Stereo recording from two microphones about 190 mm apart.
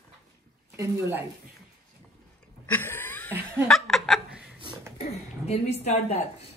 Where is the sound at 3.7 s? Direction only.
Centre (ahead or behind).